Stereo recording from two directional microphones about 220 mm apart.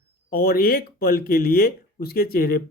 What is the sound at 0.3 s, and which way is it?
Speech, 45° left (ahead or behind).